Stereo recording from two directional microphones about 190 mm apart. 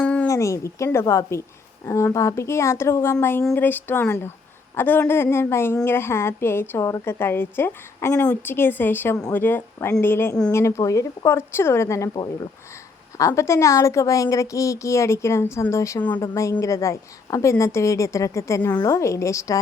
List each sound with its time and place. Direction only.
0.0 s a woman's voice: 5° left (ahead or behind)